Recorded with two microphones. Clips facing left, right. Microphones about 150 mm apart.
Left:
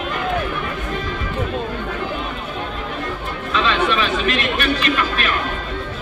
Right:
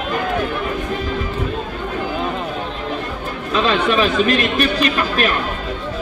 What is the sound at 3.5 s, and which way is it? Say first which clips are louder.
Speech: right 3 dB; 40° right (ahead or behind).